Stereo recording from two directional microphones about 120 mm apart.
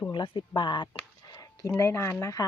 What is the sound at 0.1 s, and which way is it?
Speech, 40° left (ahead or behind).